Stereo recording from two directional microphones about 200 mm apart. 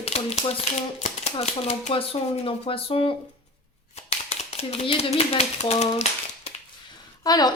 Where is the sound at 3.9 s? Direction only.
30° left (ahead or behind).